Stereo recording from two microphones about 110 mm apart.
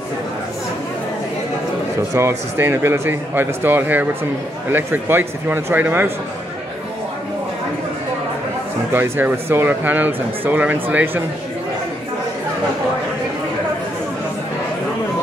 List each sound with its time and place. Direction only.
2.1 s speech: 25° right (ahead or behind)
8.9 s speech: 20° right (ahead or behind)